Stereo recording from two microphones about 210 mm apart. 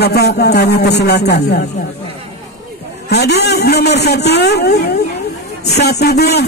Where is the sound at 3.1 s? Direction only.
50° left (ahead or behind).